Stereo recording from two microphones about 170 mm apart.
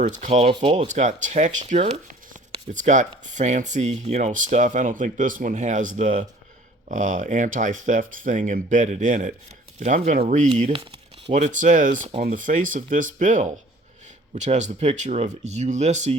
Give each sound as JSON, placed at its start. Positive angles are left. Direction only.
{"t": 0.0, "sound": "speech", "side_deg": -40}
{"t": 0.9, "sound": "speech", "side_deg": -45}